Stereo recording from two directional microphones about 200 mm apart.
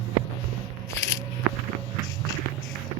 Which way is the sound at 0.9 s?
15° left (ahead or behind).